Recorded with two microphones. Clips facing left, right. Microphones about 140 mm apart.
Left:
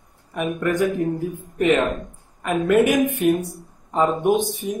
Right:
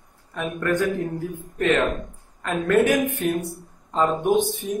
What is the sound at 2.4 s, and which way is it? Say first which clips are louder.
Speech: left 2 dB; 15° left (ahead or behind).